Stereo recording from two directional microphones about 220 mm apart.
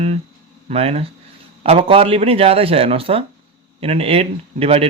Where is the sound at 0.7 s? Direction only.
25° right (ahead or behind).